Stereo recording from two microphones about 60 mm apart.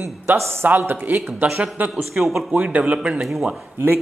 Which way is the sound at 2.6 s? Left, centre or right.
Right.